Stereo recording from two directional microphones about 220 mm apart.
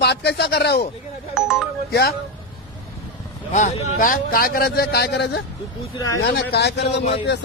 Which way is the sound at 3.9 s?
40° left (ahead or behind).